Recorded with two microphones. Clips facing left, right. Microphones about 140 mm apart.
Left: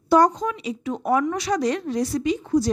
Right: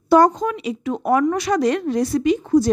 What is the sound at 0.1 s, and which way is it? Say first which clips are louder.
Speech: right 3 dB; 55° right (ahead or behind).